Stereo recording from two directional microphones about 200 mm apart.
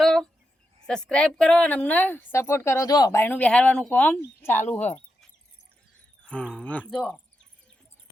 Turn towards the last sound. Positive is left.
turn(degrees=5)  # may be behind; listen again after turning